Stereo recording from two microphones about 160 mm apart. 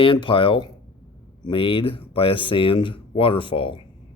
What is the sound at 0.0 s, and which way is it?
Speech, 30° left (ahead or behind).